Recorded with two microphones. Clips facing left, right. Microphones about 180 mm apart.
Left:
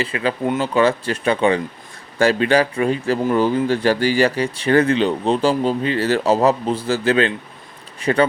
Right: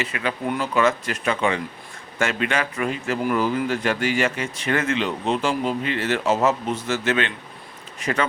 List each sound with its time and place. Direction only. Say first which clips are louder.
0.0 s speech: left 5 dB; 30° left (ahead or behind)